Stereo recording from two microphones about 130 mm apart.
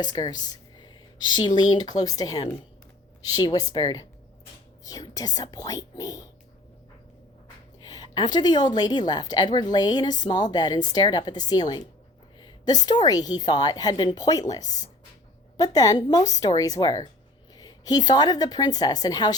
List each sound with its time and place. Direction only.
0.0 s speech: 30° left (ahead or behind)
7.4 s a woman's voice: 30° left (ahead or behind)